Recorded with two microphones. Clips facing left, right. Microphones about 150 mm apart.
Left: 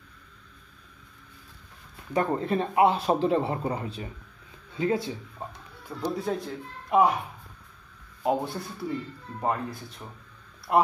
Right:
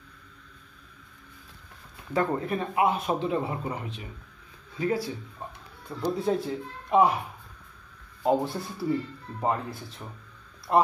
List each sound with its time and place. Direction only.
2.1 s speech: 20° left (ahead or behind)
4.7 s speech: 25° left (ahead or behind)
5.9 s speech: centre (ahead or behind)
8.2 s speech: centre (ahead or behind)